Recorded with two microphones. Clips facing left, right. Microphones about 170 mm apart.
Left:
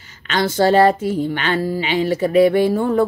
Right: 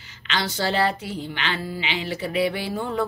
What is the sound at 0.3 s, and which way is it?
Speech, 50° left (ahead or behind).